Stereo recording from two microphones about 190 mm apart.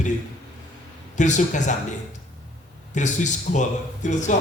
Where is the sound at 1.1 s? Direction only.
40° left (ahead or behind).